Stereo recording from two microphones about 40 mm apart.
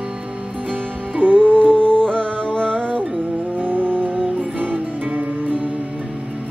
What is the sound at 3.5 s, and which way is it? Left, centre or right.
Music, right.